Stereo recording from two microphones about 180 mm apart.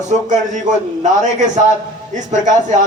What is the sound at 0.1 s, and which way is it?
Speech, 45° right (ahead or behind).